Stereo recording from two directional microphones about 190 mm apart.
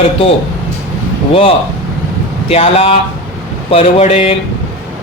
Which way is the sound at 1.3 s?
30° left (ahead or behind).